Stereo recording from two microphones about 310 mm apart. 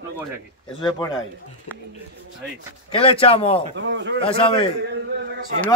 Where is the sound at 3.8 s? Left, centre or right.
Right.